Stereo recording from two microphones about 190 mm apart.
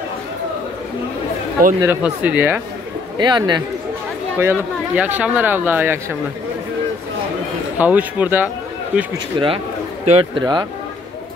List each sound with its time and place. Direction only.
1.8 s speech: 10° right (ahead or behind)
3.2 s a man's voice: 25° right (ahead or behind)
4.4 s speech: 10° right (ahead or behind)
7.7 s speech: 10° right (ahead or behind)
9.3 s a man's voice: 25° right (ahead or behind)
10.4 s a man's voice: 20° right (ahead or behind)